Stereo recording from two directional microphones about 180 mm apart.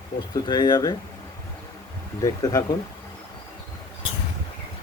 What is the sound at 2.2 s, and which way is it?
Speech, 20° left (ahead or behind).